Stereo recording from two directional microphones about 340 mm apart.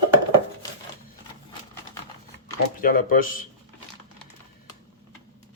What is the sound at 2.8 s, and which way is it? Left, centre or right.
Speech, left.